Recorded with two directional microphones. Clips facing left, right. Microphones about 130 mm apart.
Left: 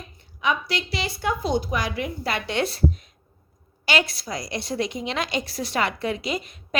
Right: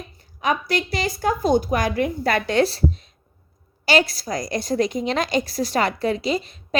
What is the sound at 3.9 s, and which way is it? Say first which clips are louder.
A woman's voice: right 5 dB; 35° right (ahead or behind).